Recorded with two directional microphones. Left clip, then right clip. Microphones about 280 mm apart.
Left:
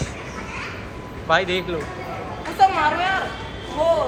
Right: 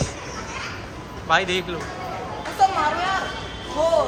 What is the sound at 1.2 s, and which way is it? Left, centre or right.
Speech, centre.